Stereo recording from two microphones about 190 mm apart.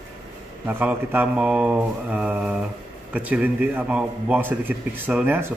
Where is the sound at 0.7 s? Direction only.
10° right (ahead or behind).